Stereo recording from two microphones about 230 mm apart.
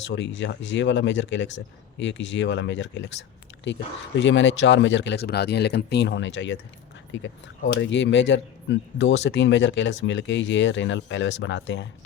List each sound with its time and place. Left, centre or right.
0.0 s speech: left